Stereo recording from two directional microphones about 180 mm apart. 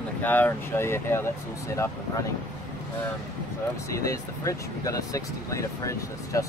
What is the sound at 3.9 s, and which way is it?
Speech, 15° left (ahead or behind).